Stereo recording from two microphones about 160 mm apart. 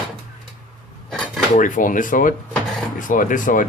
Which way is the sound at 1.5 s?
55° left (ahead or behind).